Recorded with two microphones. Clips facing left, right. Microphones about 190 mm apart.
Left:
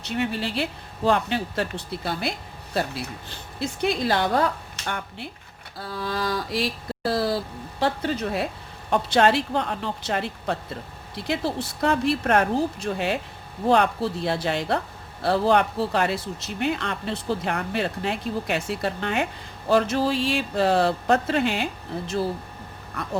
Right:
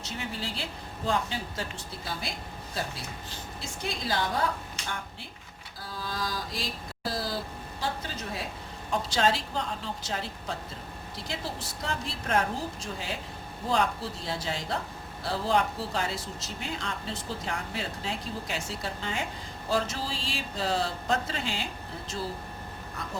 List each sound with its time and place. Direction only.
0.0 s speech: 65° left (ahead or behind)
5.8 s speech: 65° left (ahead or behind)